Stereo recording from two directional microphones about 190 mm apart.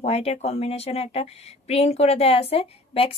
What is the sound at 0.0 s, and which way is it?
A woman's voice, 35° left (ahead or behind).